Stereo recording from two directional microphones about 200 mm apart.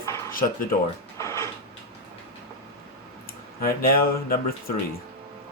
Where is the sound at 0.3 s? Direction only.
45° left (ahead or behind).